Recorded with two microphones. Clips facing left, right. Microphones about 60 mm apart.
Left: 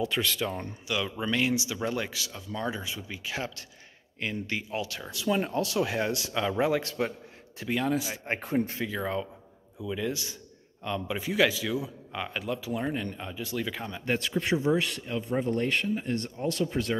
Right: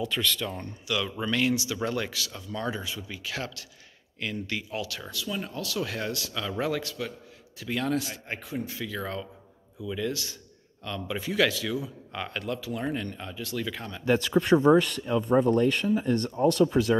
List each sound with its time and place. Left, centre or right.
0.0 s speech: centre
6.8 s a man's voice: left
7.7 s speech: centre
8.3 s speech: left
8.8 s speech: centre
14.1 s speech: right
16.0 s speech: right